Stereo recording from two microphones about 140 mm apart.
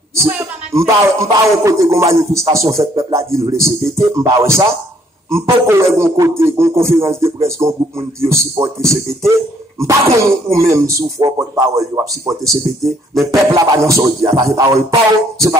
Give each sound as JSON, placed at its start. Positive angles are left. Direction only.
{"t": 0.3, "sound": "speech", "side_deg": -15}
{"t": 12.4, "sound": "speech", "side_deg": 0}
{"t": 13.5, "sound": "speech", "side_deg": -20}